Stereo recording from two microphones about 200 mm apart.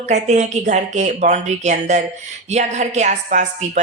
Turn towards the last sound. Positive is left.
turn(degrees=-35)  # may be behind; listen again after turning